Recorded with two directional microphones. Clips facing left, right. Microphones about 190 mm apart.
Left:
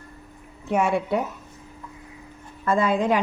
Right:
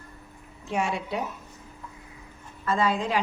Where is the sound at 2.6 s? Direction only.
55° left (ahead or behind).